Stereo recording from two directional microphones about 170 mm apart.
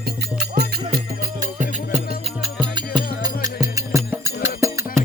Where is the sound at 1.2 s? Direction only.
50° right (ahead or behind).